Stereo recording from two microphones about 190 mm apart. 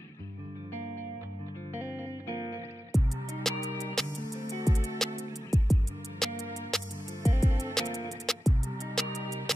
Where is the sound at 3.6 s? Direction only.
15° right (ahead or behind).